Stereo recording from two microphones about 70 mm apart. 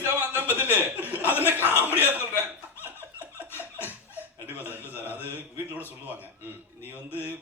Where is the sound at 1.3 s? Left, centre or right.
Right.